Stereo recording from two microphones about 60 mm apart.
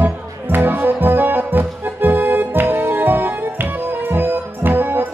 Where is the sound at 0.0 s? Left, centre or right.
Right.